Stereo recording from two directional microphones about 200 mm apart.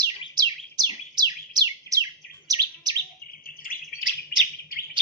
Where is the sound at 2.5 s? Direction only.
20° right (ahead or behind).